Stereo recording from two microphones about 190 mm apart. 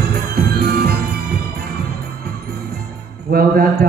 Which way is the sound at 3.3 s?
50° right (ahead or behind).